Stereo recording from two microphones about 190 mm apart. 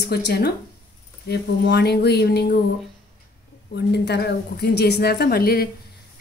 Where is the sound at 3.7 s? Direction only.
60° left (ahead or behind).